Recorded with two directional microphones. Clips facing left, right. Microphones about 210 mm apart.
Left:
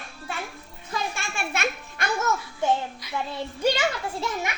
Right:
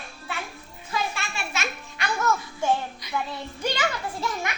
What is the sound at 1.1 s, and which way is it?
Music, 55° left (ahead or behind).